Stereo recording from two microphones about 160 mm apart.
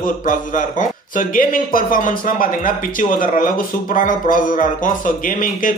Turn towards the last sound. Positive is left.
turn(degrees=60)  # may be behind; listen again after turning